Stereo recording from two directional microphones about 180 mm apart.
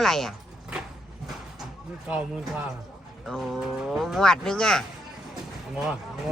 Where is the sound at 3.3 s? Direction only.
Centre (ahead or behind).